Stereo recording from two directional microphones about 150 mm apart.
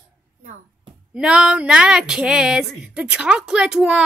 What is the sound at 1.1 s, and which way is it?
Speech, 5° right (ahead or behind).